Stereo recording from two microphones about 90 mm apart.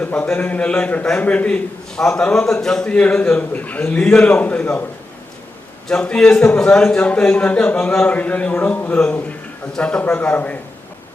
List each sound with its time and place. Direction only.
0.0 s a man's voice: 20° left (ahead or behind)
5.9 s a man's voice: 10° left (ahead or behind)